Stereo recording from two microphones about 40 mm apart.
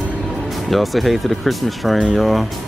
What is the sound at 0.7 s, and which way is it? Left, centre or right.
Speech, centre.